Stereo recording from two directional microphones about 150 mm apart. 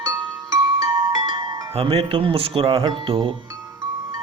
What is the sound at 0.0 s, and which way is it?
Music, 25° right (ahead or behind).